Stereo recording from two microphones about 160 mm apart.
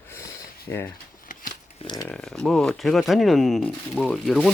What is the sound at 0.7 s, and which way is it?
Speech, 15° left (ahead or behind).